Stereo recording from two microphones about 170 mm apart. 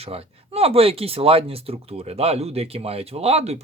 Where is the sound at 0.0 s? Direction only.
35° right (ahead or behind).